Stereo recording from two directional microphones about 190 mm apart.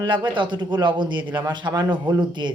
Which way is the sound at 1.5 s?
25° right (ahead or behind).